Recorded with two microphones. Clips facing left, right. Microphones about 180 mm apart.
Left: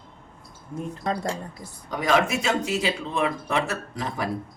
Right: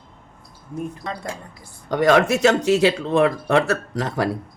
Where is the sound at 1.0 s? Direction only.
40° left (ahead or behind).